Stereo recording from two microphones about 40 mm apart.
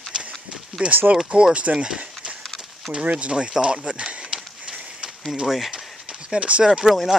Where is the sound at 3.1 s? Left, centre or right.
Right.